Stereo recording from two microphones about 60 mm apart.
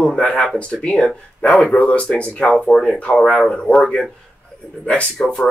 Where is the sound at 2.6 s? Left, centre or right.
Centre.